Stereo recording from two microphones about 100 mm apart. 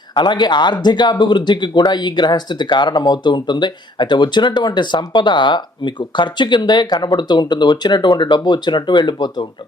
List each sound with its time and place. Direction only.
0.1 s speech: 50° left (ahead or behind)